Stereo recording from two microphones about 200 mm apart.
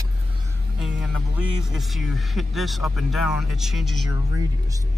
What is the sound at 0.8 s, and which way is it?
Speech, centre (ahead or behind).